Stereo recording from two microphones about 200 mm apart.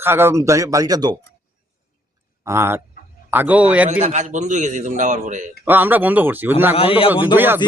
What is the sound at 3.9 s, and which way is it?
A man's voice, 35° right (ahead or behind).